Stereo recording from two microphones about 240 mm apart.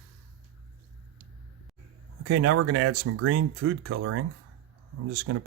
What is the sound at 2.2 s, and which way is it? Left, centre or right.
Speech, right.